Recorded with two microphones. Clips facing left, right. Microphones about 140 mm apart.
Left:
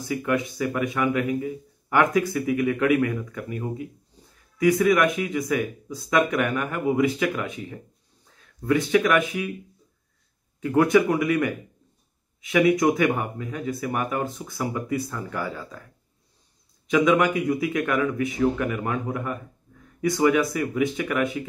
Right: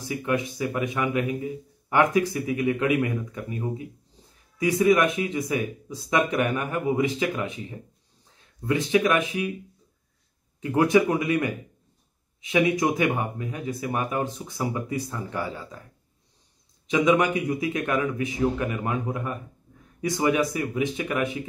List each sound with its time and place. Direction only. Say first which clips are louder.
0.1 s a man's voice: left 2 dB; 20° right (ahead or behind)
10.6 s a man's voice: left 1 dB; 20° right (ahead or behind)
16.9 s a man's voice: left 1 dB; 25° right (ahead or behind)